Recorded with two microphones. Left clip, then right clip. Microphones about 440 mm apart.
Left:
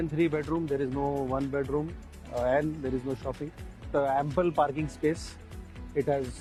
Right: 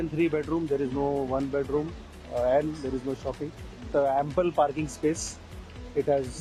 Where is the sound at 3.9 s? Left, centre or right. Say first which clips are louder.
Right 2 dB; left.